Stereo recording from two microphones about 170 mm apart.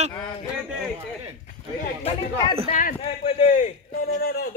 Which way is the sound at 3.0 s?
35° left (ahead or behind).